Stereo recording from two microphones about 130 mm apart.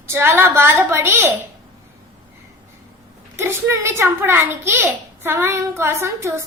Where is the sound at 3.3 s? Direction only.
20° right (ahead or behind).